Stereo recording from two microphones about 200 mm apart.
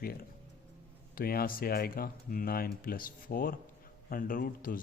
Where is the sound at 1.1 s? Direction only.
50° left (ahead or behind).